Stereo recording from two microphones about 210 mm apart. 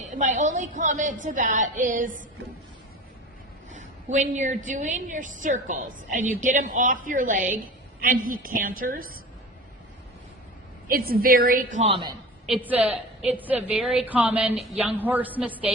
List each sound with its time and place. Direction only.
0.2 s a woman's voice: 35° right (ahead or behind)
3.7 s a woman's voice: 35° right (ahead or behind)
10.8 s a woman's voice: 45° right (ahead or behind); by 12.1 s 25° right (ahead or behind)
12.5 s a woman's voice: 5° right (ahead or behind)